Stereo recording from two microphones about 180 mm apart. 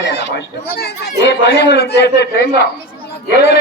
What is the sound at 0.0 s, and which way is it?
Chatter, 75° left (ahead or behind).